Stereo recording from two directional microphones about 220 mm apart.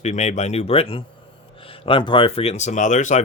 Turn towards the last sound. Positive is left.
turn(degrees=35)  # may be behind; listen again after turning